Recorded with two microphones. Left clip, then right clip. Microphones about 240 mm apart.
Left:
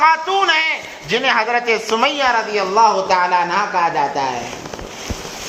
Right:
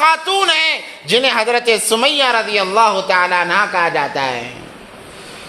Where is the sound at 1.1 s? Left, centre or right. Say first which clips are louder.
Right 2 dB; right.